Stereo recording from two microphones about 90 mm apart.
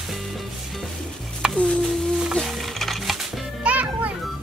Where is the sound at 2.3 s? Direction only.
Centre (ahead or behind).